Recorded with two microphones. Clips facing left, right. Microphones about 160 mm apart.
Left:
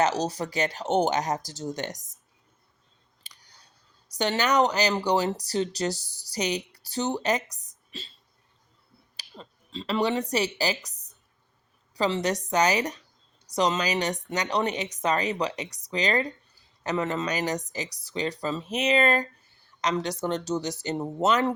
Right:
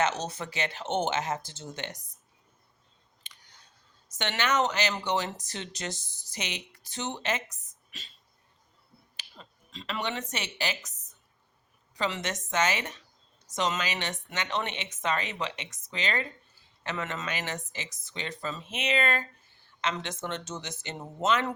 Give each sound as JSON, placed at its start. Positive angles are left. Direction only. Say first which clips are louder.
{"t": 0.0, "sound": "a woman's voice", "louder": "left 4 dB", "side_deg": 35}
{"t": 3.2, "sound": "clicking", "louder": "left 1 dB", "side_deg": 35}
{"t": 4.1, "sound": "a woman's voice", "louder": "left 5 dB", "side_deg": 35}
{"t": 9.1, "sound": "a woman's voice", "louder": "left 6 dB", "side_deg": 35}